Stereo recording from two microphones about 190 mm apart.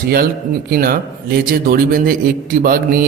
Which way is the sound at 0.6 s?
50° right (ahead or behind).